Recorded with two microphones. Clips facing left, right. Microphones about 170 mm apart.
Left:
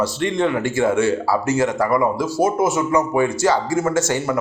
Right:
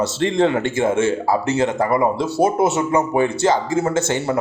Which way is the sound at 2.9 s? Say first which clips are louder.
Even; 25° right (ahead or behind).